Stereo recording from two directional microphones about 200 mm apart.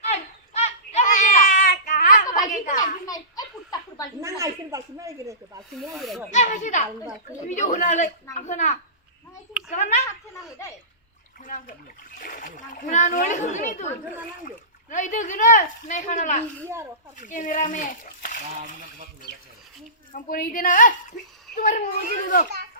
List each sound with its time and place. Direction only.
0.0 s children playing: 35° left (ahead or behind)
3.1 s a sound: 20° left (ahead or behind)
4.2 s a woman's voice: 15° right (ahead or behind)
5.7 s speech: centre (ahead or behind)
6.3 s speech: 40° left (ahead or behind)
10.1 s a sound: 15° left (ahead or behind)
11.4 s speech: 40° left (ahead or behind)
20.1 s a woman's voice: 45° left (ahead or behind)